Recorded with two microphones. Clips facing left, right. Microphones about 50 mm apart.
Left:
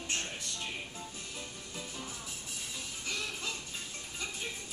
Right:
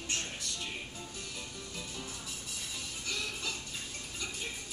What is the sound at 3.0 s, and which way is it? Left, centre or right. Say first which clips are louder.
Music: even; left.